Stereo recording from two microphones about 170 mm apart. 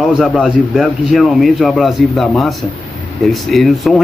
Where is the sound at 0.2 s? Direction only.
Centre (ahead or behind).